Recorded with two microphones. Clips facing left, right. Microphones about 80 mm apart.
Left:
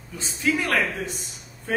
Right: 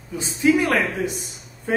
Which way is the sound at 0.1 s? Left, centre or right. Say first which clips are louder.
Right 7 dB; centre.